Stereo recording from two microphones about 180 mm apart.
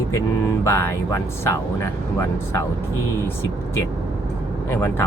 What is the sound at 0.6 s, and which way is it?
Speech, 15° left (ahead or behind).